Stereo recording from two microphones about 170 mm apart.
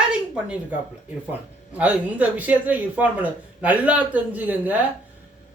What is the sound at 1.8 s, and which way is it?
A man's voice, 10° right (ahead or behind).